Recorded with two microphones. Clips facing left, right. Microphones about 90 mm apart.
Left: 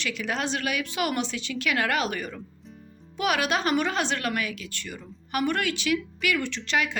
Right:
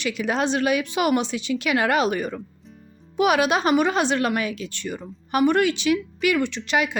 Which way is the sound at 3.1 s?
20° right (ahead or behind).